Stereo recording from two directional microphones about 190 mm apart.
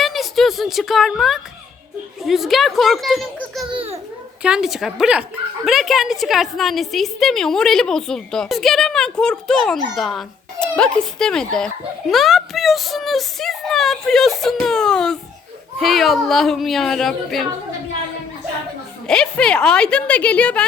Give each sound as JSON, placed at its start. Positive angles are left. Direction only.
{"t": 0.0, "sound": "a sound", "side_deg": 0}
{"t": 2.2, "sound": "a woman's voice", "side_deg": 0}
{"t": 3.7, "sound": "babbling", "side_deg": -30}
{"t": 4.4, "sound": "a woman's voice", "side_deg": -5}
{"t": 19.0, "sound": "a woman's voice", "side_deg": 5}